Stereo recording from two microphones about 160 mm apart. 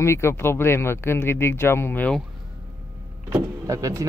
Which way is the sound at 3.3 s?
20° right (ahead or behind).